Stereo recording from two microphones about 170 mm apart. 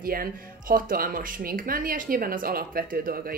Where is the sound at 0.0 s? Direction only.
60° right (ahead or behind).